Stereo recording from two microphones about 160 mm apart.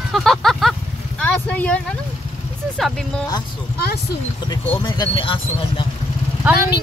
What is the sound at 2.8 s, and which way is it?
Speech, centre (ahead or behind).